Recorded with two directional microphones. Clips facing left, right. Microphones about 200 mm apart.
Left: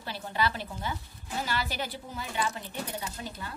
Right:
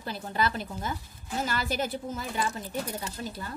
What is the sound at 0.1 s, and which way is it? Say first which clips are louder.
A woman's voice: right 1 dB; 40° right (ahead or behind).